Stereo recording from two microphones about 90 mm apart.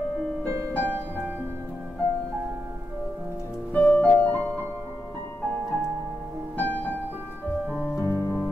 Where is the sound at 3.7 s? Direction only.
15° left (ahead or behind).